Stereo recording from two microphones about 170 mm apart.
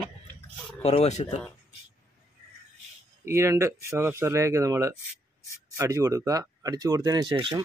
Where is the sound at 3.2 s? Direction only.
15° right (ahead or behind).